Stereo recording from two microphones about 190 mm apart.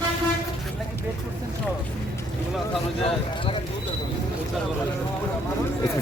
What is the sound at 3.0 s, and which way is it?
Speech, 30° left (ahead or behind).